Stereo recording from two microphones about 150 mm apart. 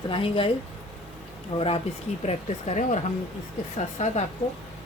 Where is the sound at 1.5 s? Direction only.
45° left (ahead or behind).